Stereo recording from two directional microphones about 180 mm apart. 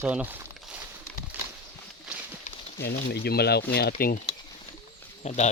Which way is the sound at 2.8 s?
65° left (ahead or behind).